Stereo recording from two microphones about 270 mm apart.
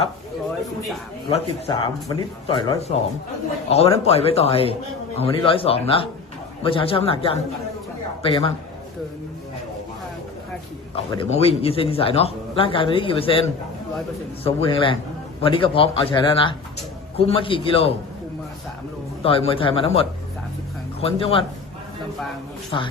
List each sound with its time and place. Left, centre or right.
1.3 s a man's voice: centre
10.9 s a man's voice: centre
14.4 s a man's voice: centre
19.2 s a man's voice: left